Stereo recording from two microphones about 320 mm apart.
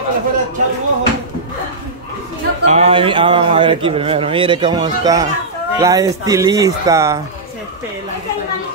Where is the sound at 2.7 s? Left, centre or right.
Centre.